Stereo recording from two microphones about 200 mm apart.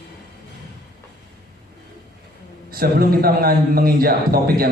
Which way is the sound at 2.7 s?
50° right (ahead or behind).